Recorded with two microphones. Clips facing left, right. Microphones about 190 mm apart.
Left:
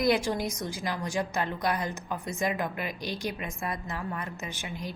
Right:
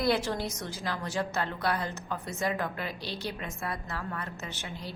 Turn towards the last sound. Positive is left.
turn(degrees=15)  # may be behind; listen again after turning